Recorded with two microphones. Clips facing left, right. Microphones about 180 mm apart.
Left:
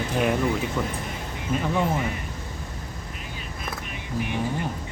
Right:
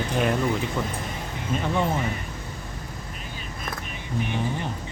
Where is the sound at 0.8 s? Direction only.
15° right (ahead or behind).